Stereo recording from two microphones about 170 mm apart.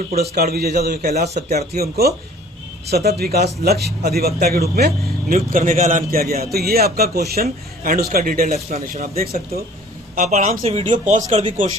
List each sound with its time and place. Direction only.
0.2 s speech: 65° right (ahead or behind)
5.5 s a man's voice: 50° right (ahead or behind)
10.2 s speech: 40° right (ahead or behind)